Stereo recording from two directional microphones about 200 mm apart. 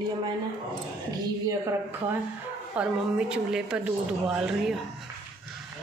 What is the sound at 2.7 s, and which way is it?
Speech, 5° right (ahead or behind).